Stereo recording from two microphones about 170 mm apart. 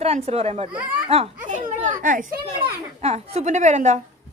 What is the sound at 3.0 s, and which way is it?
A woman's voice, 40° right (ahead or behind).